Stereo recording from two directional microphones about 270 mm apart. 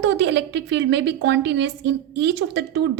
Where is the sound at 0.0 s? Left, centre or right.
Right.